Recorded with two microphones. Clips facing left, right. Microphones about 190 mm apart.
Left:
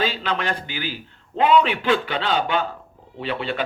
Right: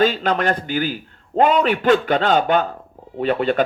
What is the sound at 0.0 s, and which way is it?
Speech, 45° right (ahead or behind).